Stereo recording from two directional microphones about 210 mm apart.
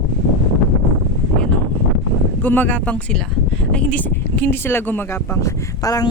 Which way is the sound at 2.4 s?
10° left (ahead or behind).